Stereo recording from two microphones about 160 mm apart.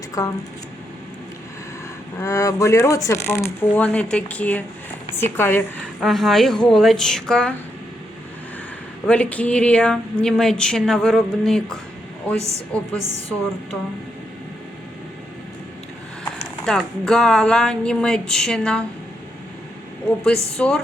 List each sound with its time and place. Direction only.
0.2 s speech: 20° left (ahead or behind)
2.2 s speech: 20° left (ahead or behind)
6.0 s speech: centre (ahead or behind)
9.0 s speech: 5° left (ahead or behind)
12.4 s a woman's voice: 20° right (ahead or behind)
16.2 s speech: 5° left (ahead or behind)
20.1 s speech: 5° left (ahead or behind)